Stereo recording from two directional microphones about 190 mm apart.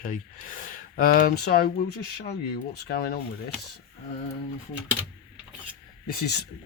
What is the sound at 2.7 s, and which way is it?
Speech, 55° left (ahead or behind).